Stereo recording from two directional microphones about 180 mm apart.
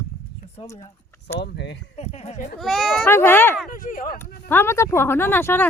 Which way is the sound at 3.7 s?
50° left (ahead or behind).